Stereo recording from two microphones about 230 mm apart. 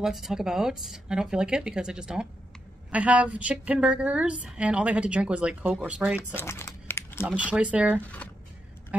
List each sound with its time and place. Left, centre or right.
0.0 s a woman's voice: centre
6.3 s crumpling: centre
7.2 s a woman's voice: centre